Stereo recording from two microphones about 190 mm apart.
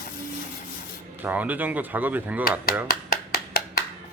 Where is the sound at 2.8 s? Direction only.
55° left (ahead or behind).